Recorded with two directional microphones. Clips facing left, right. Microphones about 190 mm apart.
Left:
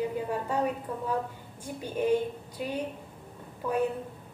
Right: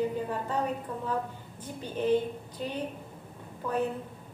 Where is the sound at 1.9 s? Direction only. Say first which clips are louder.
Even; 10° left (ahead or behind).